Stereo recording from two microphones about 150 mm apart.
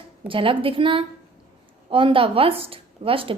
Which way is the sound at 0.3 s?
35° right (ahead or behind).